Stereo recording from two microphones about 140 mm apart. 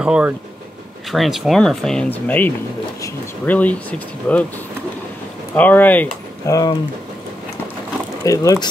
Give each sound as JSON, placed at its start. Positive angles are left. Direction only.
{"t": 0.0, "sound": "speech", "side_deg": -5}
{"t": 5.6, "sound": "speech", "side_deg": 10}
{"t": 6.4, "sound": "speech", "side_deg": 25}
{"t": 8.2, "sound": "speech", "side_deg": 25}